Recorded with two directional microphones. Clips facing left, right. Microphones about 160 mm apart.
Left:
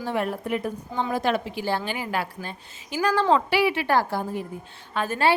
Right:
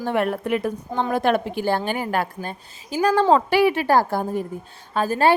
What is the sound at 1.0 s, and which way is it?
A woman's voice, 55° right (ahead or behind).